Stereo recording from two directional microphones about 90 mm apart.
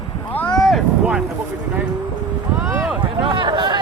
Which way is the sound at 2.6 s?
30° right (ahead or behind).